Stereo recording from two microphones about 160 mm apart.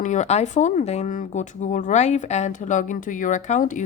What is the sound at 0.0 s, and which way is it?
A woman's voice, 50° left (ahead or behind).